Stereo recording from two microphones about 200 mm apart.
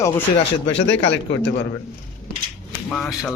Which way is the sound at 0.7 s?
65° left (ahead or behind).